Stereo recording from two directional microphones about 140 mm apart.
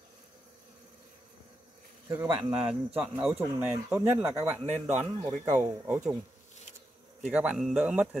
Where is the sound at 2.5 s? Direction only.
10° right (ahead or behind).